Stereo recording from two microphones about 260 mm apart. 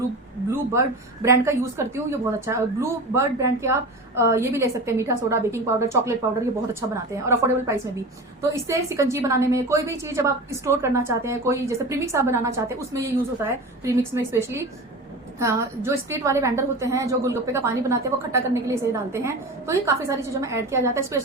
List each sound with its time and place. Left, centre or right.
0.7 s a woman's voice: centre
7.3 s a woman's voice: centre